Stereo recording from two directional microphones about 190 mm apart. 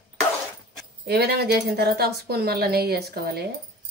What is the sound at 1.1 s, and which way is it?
Speech, 55° right (ahead or behind).